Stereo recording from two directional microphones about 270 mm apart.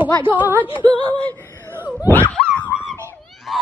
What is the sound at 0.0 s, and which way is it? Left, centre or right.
Speech, centre.